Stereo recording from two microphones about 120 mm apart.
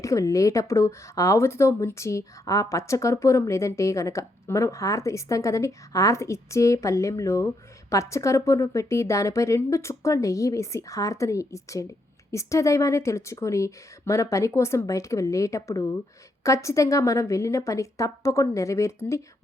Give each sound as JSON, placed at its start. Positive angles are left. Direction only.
{"t": 0.0, "sound": "speech", "side_deg": 25}